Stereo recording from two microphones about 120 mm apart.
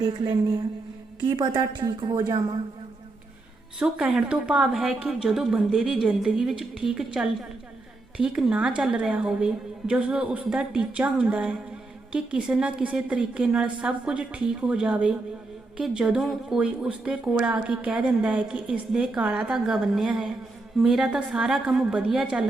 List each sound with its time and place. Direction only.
0.0 s a woman's voice: 35° right (ahead or behind)
3.8 s speech: 10° right (ahead or behind)